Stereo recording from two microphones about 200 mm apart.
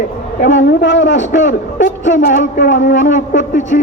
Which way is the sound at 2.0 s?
40° left (ahead or behind).